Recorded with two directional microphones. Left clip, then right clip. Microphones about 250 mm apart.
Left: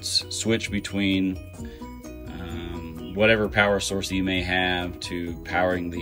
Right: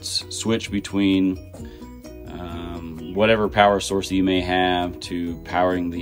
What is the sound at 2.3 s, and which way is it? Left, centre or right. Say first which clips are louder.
Music: right 4 dB; centre.